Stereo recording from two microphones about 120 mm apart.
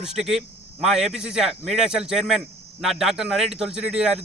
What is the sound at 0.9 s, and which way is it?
Speech, 60° right (ahead or behind).